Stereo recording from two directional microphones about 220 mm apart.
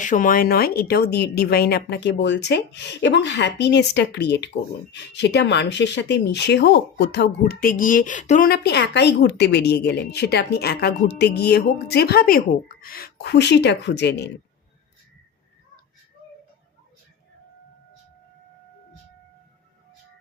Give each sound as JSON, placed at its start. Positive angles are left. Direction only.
{"t": 0.0, "sound": "a woman's voice", "side_deg": 35}
{"t": 8.4, "sound": "a woman's voice", "side_deg": 45}